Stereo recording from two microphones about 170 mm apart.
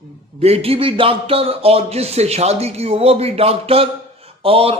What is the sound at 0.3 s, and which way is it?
A man's voice, 35° right (ahead or behind).